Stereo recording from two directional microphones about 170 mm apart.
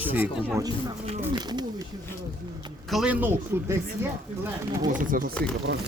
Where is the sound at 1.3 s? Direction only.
25° right (ahead or behind).